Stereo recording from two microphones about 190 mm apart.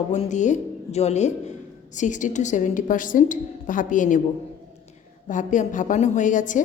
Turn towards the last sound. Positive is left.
turn(degrees=40)  # may be behind; listen again after turning